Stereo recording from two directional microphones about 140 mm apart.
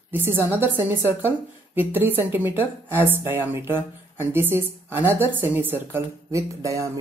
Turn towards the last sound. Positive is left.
turn(degrees=-25)  # may be behind; listen again after turning